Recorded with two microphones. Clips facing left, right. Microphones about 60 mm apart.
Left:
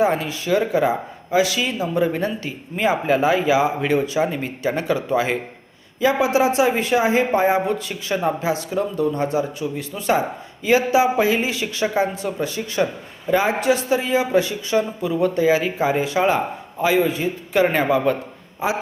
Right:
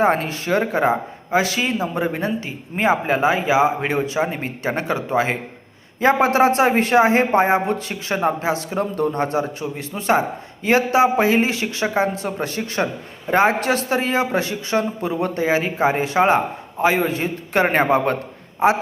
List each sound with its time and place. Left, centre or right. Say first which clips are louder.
0.0 s speech: right 1 dB; right
6.0 s a man's voice: right 2 dB; right
12.2 s a man's voice: even; right